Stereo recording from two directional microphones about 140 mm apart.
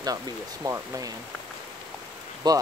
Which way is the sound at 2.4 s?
30° right (ahead or behind).